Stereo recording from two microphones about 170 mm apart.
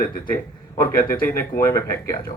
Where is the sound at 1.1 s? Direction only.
10° left (ahead or behind).